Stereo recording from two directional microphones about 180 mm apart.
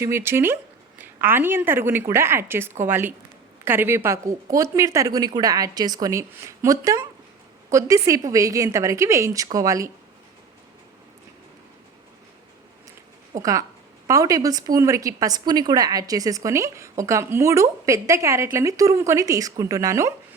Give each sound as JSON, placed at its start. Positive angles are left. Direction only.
{"t": 0.0, "sound": "a woman's voice", "side_deg": -15}
{"t": 13.3, "sound": "a woman's voice", "side_deg": -20}